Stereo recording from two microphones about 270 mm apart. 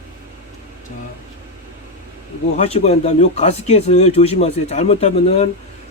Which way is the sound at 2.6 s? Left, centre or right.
Left.